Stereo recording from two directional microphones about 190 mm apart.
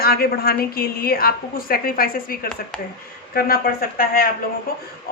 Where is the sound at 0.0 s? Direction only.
55° left (ahead or behind).